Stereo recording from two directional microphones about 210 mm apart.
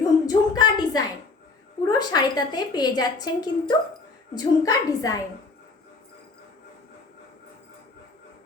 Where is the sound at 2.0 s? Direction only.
20° left (ahead or behind).